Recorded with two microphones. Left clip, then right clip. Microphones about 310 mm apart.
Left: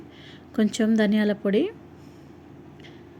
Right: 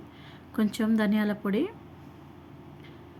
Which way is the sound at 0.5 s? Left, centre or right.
Centre.